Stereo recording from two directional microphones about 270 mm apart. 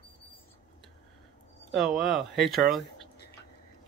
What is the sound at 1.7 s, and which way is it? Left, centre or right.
Speech, centre.